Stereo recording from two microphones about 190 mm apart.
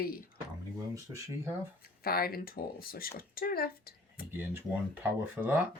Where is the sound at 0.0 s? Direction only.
50° left (ahead or behind).